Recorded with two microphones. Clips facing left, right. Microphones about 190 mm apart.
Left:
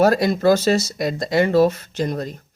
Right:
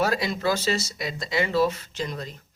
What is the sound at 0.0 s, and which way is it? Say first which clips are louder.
Speech: left 9 dB; 45° left (ahead or behind).